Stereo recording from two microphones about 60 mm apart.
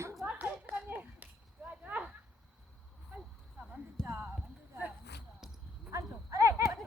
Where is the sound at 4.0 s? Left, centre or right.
Right.